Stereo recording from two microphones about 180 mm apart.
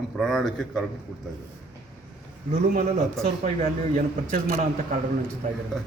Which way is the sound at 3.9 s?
50° right (ahead or behind).